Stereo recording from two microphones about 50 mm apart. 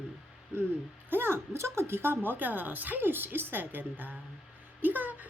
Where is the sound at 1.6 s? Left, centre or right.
Right.